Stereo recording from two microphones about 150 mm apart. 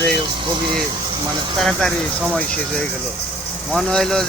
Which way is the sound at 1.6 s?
Centre (ahead or behind).